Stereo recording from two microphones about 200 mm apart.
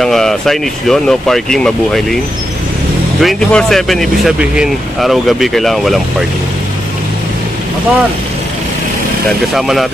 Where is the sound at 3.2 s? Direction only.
Centre (ahead or behind).